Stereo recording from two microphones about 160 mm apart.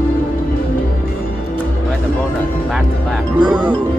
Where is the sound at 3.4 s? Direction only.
25° right (ahead or behind).